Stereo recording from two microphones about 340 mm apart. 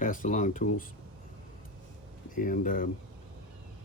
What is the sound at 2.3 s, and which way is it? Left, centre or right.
Speech, left.